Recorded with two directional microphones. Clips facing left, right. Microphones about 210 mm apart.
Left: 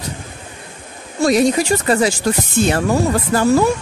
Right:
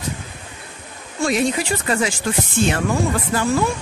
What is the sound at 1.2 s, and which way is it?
Speech, 40° left (ahead or behind).